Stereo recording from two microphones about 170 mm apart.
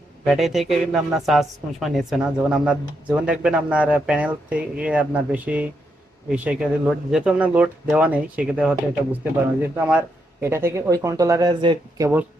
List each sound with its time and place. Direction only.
0.3 s speech: centre (ahead or behind); by 12.0 s 25° right (ahead or behind)